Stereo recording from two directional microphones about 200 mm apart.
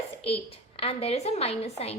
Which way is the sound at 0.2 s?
30° left (ahead or behind).